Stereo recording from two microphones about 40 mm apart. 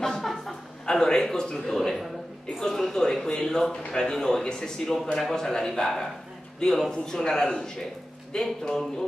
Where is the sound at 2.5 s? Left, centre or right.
Centre.